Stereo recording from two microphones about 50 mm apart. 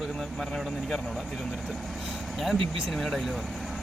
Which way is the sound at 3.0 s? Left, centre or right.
Centre.